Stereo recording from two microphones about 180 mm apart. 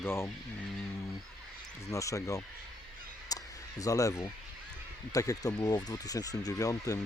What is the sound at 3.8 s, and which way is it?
Speech, 20° left (ahead or behind).